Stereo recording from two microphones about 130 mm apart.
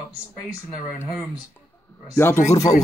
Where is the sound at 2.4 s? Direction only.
25° left (ahead or behind).